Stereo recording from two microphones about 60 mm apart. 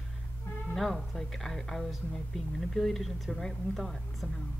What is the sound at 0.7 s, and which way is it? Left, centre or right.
Speech, centre.